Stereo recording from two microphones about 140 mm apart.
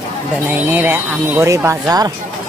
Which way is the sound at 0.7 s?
15° right (ahead or behind).